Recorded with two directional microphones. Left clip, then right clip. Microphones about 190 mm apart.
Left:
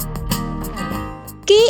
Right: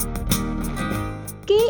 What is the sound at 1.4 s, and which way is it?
Speech, 25° left (ahead or behind).